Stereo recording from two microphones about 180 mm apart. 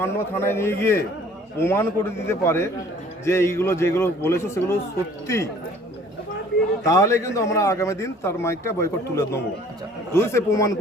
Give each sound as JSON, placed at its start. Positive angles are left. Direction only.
{"t": 0.0, "sound": "a man's voice", "side_deg": 15}
{"t": 6.8, "sound": "a man's voice", "side_deg": 15}